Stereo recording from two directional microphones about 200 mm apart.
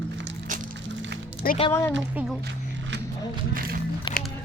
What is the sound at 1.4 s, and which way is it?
Speech, 50° left (ahead or behind).